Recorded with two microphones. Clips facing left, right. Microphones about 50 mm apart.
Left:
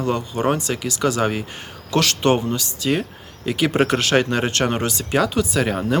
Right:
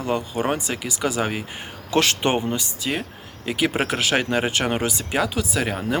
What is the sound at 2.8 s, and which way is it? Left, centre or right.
Speech, centre.